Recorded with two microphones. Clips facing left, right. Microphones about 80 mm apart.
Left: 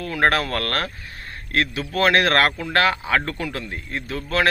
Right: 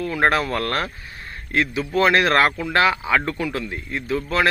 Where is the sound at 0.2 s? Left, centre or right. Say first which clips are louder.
Even; centre.